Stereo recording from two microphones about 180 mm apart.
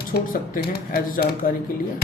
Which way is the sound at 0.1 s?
65° left (ahead or behind).